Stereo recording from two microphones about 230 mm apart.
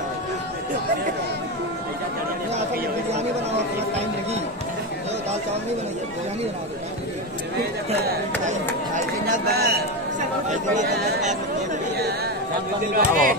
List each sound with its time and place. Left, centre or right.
8.5 s speech: right
10.5 s speech: right
12.9 s speech: right